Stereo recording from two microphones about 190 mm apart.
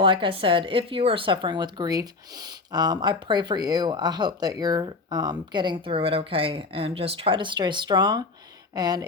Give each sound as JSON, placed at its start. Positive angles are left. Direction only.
{"t": 0.0, "sound": "speech", "side_deg": -25}